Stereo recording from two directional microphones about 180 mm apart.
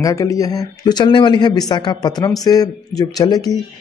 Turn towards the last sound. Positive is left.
turn(degrees=20)  # may be behind; listen again after turning